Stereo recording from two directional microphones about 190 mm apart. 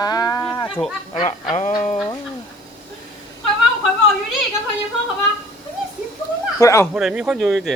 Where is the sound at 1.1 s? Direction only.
35° left (ahead or behind).